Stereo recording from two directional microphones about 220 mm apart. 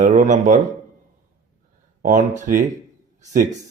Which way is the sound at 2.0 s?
35° right (ahead or behind).